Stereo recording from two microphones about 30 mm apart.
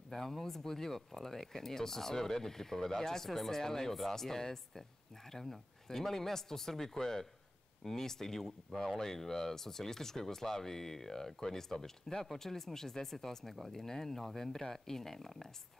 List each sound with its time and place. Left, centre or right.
0.1 s a man's voice: centre